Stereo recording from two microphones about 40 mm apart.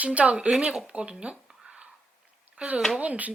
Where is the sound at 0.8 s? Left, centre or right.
Right.